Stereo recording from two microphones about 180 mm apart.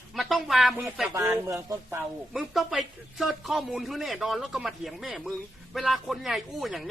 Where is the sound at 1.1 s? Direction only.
15° right (ahead or behind).